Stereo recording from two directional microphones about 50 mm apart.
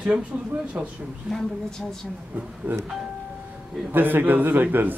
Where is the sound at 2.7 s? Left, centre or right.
Right.